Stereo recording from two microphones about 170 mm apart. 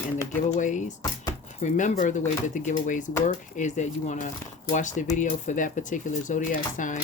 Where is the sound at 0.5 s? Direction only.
45° left (ahead or behind).